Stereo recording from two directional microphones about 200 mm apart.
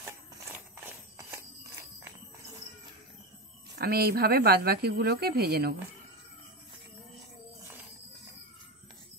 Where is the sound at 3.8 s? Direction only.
50° right (ahead or behind).